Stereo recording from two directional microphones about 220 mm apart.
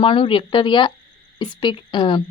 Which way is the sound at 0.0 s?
25° left (ahead or behind).